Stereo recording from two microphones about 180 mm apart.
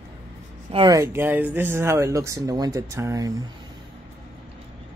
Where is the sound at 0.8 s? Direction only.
15° right (ahead or behind).